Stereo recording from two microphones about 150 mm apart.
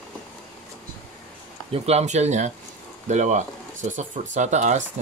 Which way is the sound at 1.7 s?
45° right (ahead or behind).